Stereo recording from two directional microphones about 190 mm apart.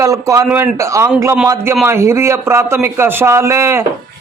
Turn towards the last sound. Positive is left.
turn(degrees=-15)  # may be behind; listen again after turning